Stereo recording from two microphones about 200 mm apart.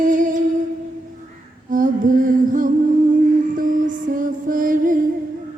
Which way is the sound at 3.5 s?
40° right (ahead or behind).